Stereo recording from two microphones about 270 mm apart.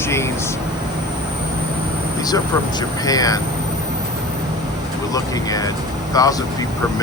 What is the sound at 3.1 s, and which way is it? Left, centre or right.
Speech, centre.